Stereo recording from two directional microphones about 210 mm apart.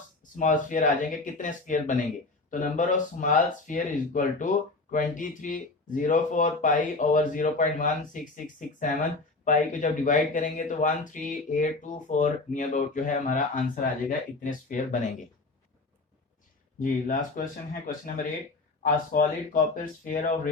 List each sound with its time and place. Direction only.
0.3 s speech: 40° left (ahead or behind)
16.8 s speech: 40° left (ahead or behind)